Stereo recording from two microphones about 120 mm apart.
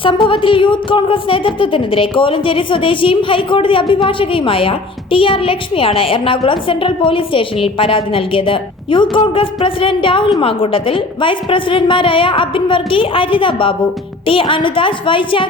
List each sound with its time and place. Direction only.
0.0 s a woman's voice: 45° left (ahead or behind)